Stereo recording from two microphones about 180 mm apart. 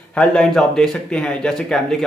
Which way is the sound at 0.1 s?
5° left (ahead or behind).